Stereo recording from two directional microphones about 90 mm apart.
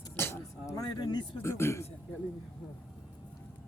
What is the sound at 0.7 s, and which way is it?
Speech, 45° left (ahead or behind).